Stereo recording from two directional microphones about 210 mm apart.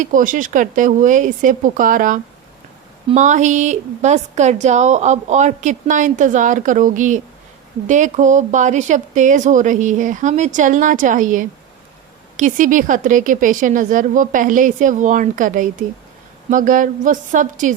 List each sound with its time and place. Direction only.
0.0 s a woman's voice: 40° right (ahead or behind)